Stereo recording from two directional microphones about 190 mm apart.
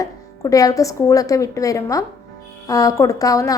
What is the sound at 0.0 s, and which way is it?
A woman's voice, 20° left (ahead or behind).